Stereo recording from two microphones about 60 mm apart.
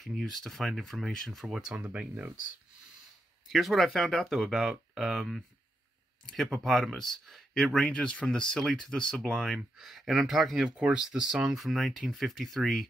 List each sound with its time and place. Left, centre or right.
0.0 s speech: centre
1.4 s speech: centre
1.8 s speech: right
3.4 s speech: centre
9.8 s speech: centre
10.6 s speech: centre